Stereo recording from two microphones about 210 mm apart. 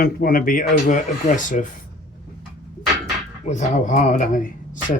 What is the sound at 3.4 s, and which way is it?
Speech, 35° left (ahead or behind).